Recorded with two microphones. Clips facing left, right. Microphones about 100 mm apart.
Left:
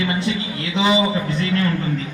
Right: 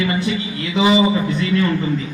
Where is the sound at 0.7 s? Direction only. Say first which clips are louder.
Right 3 dB; 5° right (ahead or behind).